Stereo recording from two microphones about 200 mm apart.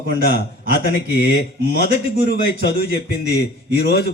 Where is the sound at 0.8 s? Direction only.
55° left (ahead or behind).